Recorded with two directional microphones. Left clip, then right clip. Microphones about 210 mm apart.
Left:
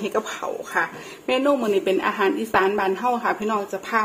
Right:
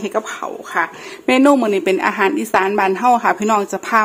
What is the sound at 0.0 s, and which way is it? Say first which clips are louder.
A woman's voice: right 4 dB; 35° right (ahead or behind).